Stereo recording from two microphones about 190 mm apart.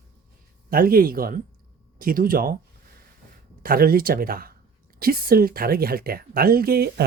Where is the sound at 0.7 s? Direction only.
50° right (ahead or behind).